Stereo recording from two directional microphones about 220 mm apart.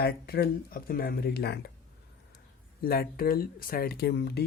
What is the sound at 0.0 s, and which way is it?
Speech, 45° left (ahead or behind).